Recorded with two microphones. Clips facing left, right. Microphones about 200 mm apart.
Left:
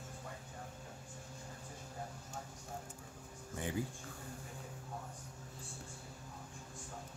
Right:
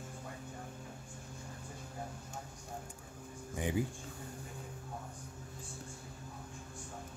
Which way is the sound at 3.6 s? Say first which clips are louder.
Right 4 dB; 15° right (ahead or behind).